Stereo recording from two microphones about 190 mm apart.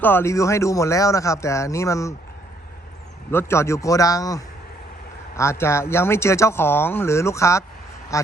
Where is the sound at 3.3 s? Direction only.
10° left (ahead or behind).